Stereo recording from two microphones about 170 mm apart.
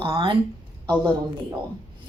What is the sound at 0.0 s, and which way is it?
Speech, 30° right (ahead or behind).